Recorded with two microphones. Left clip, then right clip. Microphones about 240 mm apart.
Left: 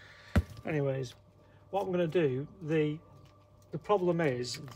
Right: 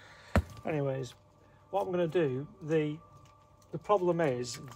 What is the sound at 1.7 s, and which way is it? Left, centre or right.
Speech, centre.